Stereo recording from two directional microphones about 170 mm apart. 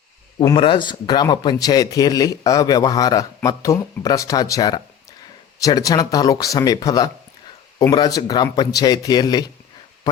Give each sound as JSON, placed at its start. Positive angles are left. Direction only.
{"t": 0.5, "sound": "a man's voice", "side_deg": 30}